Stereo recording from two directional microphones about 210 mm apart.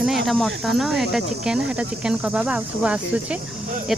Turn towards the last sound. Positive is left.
turn(degrees=-5)  # may be behind; listen again after turning